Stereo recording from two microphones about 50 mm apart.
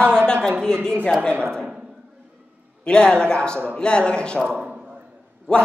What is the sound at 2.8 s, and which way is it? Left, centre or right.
A man's voice, centre.